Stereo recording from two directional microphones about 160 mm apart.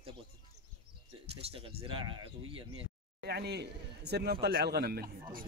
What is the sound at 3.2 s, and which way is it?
Speech, 90° right.